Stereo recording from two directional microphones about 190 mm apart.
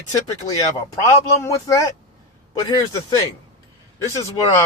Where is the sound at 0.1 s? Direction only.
20° left (ahead or behind).